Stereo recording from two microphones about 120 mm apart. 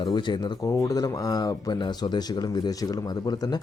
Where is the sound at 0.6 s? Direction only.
25° left (ahead or behind).